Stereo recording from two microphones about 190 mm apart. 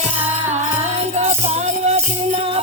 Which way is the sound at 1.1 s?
35° right (ahead or behind).